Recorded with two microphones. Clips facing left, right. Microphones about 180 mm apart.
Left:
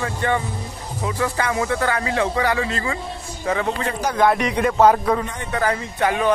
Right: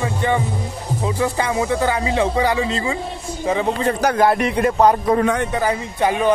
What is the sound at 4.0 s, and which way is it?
Speech, 55° right (ahead or behind).